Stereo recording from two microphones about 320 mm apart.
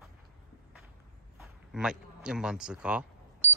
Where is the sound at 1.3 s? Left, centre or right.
Centre.